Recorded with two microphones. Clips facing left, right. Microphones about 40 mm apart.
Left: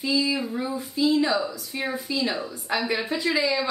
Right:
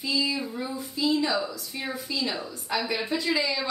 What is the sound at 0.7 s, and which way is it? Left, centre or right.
Speech, left.